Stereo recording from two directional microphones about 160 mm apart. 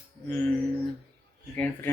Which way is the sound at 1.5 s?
10° left (ahead or behind).